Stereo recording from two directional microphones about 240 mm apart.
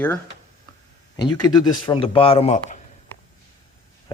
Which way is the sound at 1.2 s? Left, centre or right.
Centre.